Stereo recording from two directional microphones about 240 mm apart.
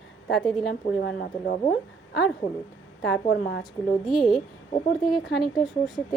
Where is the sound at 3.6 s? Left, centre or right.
Centre.